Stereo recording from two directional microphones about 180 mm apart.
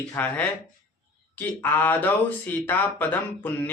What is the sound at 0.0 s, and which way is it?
Speech, 10° left (ahead or behind).